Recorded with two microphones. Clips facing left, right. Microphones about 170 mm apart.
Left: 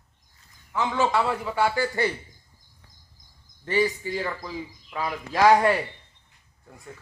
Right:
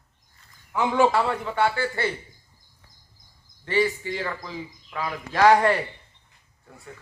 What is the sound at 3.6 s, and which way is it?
Speech, 15° left (ahead or behind).